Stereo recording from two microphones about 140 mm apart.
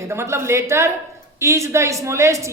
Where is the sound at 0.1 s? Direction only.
20° right (ahead or behind).